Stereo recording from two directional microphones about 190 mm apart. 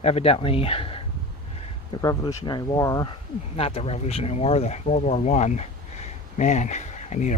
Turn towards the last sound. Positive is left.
turn(degrees=40)  # may be behind; listen again after turning